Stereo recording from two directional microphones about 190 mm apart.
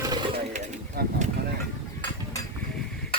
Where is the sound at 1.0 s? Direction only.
55° right (ahead or behind).